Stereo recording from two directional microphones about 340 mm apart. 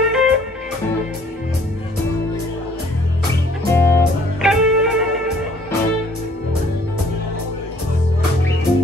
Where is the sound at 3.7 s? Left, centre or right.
Centre.